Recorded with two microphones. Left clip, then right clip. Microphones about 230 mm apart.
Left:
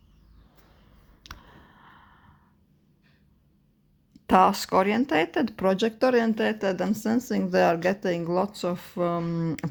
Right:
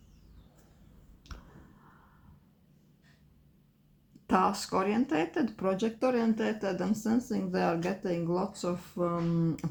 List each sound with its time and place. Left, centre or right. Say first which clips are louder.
1.2 s clicking: left 8 dB; left
4.3 s speech: left 8 dB; left